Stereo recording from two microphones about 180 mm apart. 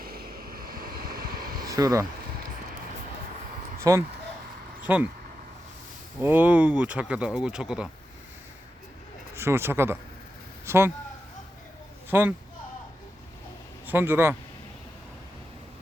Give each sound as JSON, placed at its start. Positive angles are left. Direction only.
{"t": 0.0, "sound": "vehicle", "side_deg": -55}
{"t": 1.7, "sound": "speech", "side_deg": -20}
{"t": 3.9, "sound": "speech", "side_deg": -20}
{"t": 6.1, "sound": "speech", "side_deg": -10}
{"t": 9.3, "sound": "speech", "side_deg": -15}
{"t": 12.1, "sound": "speech", "side_deg": -15}
{"t": 13.8, "sound": "speech", "side_deg": -10}